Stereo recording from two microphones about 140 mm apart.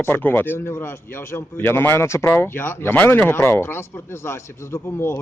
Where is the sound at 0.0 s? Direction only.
15° left (ahead or behind).